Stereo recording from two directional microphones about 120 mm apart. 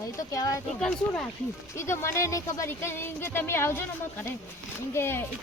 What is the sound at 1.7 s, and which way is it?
Speech, 25° left (ahead or behind).